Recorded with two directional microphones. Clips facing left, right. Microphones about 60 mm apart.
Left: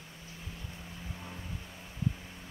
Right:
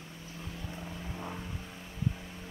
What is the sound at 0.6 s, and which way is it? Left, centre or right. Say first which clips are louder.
Vehicle: right 4 dB; right.